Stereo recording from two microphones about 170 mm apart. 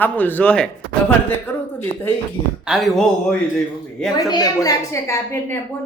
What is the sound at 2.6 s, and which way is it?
Speech, centre (ahead or behind).